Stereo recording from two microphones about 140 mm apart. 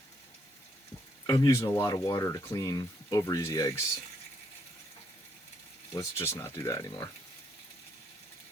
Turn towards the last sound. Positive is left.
turn(degrees=25)  # may be behind; listen again after turning